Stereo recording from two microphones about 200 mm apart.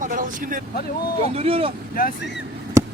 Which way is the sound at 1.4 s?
30° right (ahead or behind).